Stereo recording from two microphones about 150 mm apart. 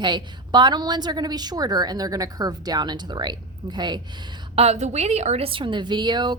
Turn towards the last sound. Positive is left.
turn(degrees=-30)  # may be behind; listen again after turning